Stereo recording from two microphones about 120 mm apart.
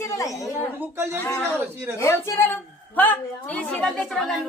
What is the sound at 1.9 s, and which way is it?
A woman's voice, 25° left (ahead or behind).